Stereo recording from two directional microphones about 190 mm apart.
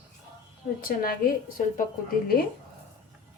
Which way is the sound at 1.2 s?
50° left (ahead or behind).